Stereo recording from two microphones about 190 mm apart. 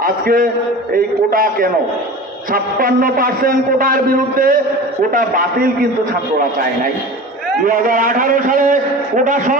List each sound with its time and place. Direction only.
0.0 s a man's voice: 50° right (ahead or behind)
7.6 s a man's voice: 45° right (ahead or behind)